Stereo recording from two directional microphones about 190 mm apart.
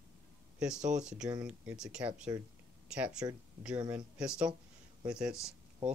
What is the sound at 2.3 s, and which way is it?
Speech, 20° right (ahead or behind).